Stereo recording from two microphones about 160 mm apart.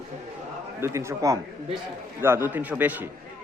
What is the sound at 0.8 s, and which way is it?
A man's voice, 15° right (ahead or behind).